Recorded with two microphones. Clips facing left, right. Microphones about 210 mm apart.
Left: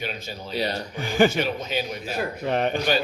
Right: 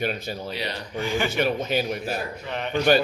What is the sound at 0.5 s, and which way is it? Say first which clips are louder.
Speech: left 3 dB; 40° left (ahead or behind).